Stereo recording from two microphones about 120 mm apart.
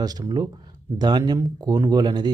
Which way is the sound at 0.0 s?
35° right (ahead or behind).